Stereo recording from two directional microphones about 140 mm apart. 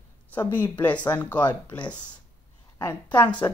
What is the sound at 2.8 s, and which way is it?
Speech, 15° left (ahead or behind).